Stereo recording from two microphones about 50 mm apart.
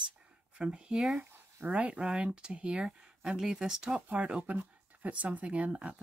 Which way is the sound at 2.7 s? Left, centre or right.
Centre.